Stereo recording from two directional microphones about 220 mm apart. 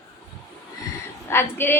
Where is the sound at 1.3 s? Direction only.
10° left (ahead or behind).